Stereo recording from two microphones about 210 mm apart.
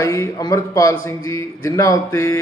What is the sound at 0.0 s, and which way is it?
A man's voice, 15° left (ahead or behind).